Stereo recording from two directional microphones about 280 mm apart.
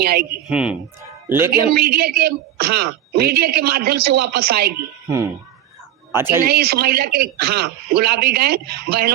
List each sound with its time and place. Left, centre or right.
0.0 s a man's voice: right
0.4 s speech: centre
1.6 s a man's voice: right
5.0 s speech: centre
6.4 s a man's voice: right